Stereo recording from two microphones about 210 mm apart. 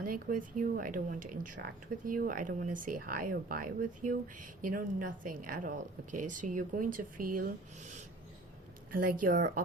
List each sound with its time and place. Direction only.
0.0 s a woman's voice: 40° right (ahead or behind)